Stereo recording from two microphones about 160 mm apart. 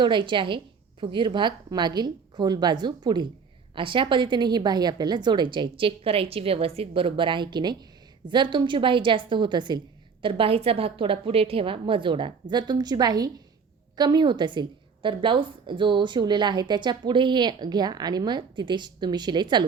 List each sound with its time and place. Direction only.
0.0 s a woman's voice: 30° right (ahead or behind)